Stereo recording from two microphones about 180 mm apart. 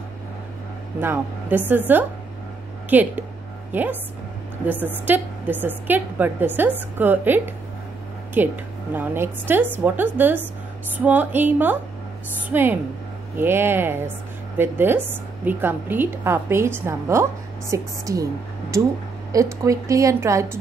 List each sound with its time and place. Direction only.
0.9 s a woman's voice: 10° right (ahead or behind)